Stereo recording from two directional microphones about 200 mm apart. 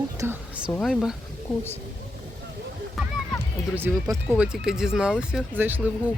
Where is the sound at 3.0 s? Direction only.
Centre (ahead or behind).